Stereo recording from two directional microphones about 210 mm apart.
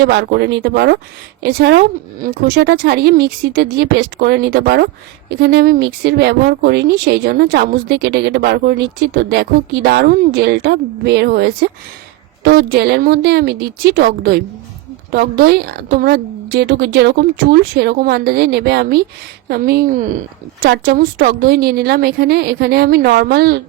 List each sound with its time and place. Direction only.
0.0 s speech: 50° right (ahead or behind)